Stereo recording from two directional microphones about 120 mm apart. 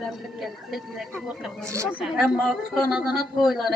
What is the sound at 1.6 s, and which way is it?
Speech, 25° right (ahead or behind).